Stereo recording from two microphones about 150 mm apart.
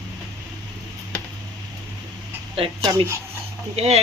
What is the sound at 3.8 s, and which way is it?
Speech, 45° right (ahead or behind).